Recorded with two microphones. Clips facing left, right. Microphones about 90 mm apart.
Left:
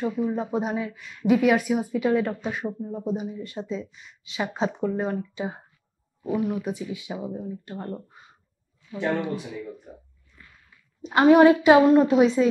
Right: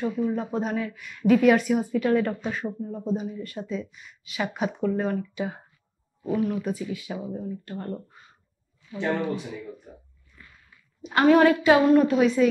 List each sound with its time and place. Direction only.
0.0 s speech: 20° left (ahead or behind)
6.2 s speech: 10° left (ahead or behind)
11.1 s a woman's voice: 20° left (ahead or behind)